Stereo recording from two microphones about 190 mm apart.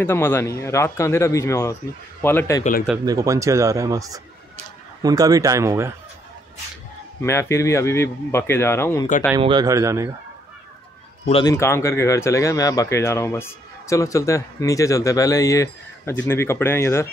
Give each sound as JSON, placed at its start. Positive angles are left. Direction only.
{"t": 0.0, "sound": "speech", "side_deg": 10}
{"t": 3.1, "sound": "speech", "side_deg": -15}
{"t": 7.2, "sound": "speech", "side_deg": 15}
{"t": 9.4, "sound": "speech", "side_deg": -25}
{"t": 11.4, "sound": "speech", "side_deg": 15}